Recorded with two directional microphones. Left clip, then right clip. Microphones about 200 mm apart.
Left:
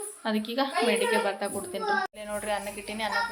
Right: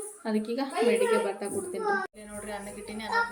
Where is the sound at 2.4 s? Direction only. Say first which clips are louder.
Left 5 dB; 15° left (ahead or behind).